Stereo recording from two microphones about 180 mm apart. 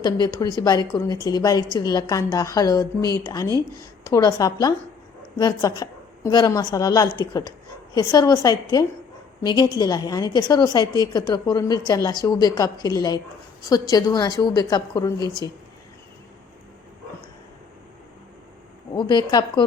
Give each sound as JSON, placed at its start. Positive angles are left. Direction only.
{"t": 0.0, "sound": "a woman's voice", "side_deg": 20}
{"t": 18.9, "sound": "a woman's voice", "side_deg": 25}